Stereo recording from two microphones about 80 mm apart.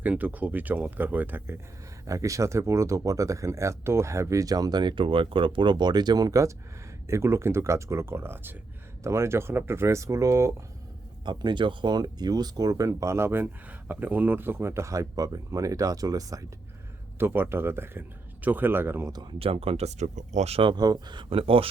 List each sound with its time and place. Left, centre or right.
0.0 s speech: right
2.0 s speech: right
7.1 s speech: right
11.3 s speech: right
17.2 s speech: right
20.6 s speech: right
20.8 s speech: right